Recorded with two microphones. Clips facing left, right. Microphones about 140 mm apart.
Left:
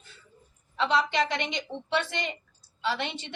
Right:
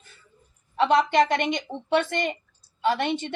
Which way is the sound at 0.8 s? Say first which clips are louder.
Right 6 dB; 50° right (ahead or behind).